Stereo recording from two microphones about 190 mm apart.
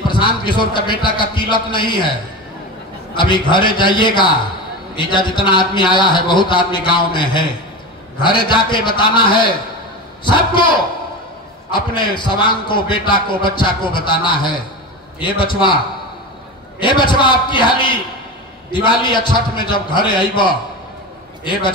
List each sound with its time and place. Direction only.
0.1 s a man's voice: 25° left (ahead or behind)
3.2 s a man's voice: 25° left (ahead or behind)
16.8 s a man's voice: 25° left (ahead or behind)